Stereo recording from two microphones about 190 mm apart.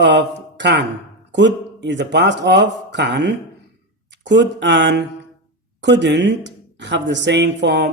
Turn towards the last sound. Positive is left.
turn(degrees=-65)  # may be behind; listen again after turning